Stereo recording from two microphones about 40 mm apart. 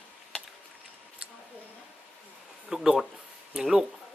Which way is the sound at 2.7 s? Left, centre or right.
Centre.